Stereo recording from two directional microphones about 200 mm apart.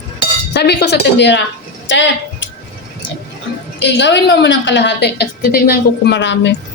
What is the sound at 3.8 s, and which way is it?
A woman's voice, 60° left (ahead or behind).